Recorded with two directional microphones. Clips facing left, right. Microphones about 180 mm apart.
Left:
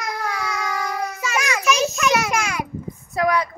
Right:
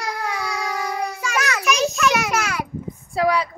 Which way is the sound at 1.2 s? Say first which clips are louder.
Even; 10° left (ahead or behind).